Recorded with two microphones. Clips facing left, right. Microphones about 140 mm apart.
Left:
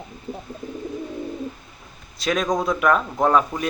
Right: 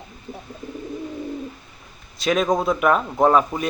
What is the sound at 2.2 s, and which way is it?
Speech, centre (ahead or behind).